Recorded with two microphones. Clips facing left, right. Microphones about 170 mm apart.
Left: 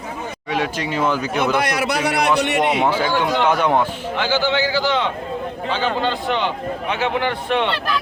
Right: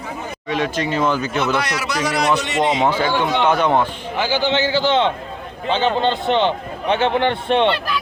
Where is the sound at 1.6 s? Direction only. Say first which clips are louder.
Left 2 dB; 55° left (ahead or behind).